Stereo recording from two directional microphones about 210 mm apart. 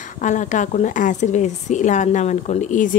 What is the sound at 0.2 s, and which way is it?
Speech, 35° left (ahead or behind).